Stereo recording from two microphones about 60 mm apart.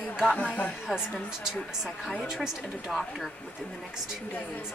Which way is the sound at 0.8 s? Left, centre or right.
Centre.